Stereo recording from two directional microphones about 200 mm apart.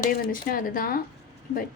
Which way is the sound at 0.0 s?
45° left (ahead or behind).